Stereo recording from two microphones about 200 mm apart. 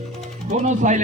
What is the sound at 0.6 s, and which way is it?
Speech, 35° right (ahead or behind).